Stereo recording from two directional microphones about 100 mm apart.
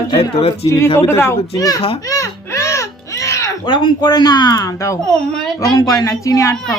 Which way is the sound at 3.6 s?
50° left (ahead or behind).